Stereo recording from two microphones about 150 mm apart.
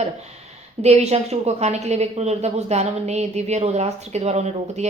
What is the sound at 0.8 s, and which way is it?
A woman's voice, 45° right (ahead or behind).